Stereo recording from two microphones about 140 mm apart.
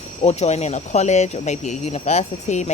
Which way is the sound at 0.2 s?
50° left (ahead or behind).